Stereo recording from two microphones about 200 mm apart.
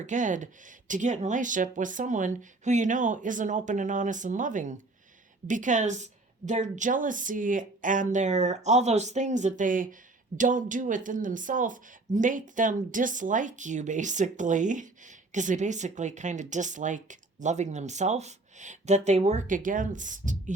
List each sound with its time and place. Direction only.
0.0 s speech: 40° right (ahead or behind)